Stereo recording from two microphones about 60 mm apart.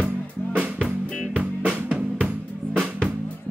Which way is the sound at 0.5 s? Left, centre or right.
Centre.